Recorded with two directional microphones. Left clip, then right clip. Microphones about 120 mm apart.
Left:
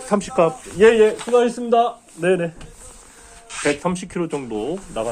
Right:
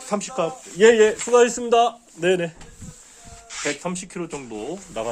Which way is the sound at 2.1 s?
90° right.